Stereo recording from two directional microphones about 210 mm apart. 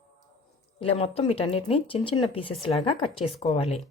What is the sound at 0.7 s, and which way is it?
Speech, 25° left (ahead or behind).